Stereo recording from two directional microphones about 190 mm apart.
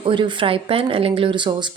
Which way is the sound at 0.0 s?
25° right (ahead or behind).